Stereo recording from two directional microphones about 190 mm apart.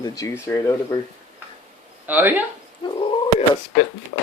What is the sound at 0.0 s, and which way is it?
Speech, 15° left (ahead or behind).